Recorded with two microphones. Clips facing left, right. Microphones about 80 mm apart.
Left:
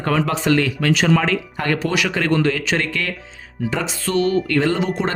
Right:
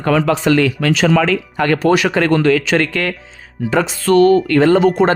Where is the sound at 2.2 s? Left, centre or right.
Right.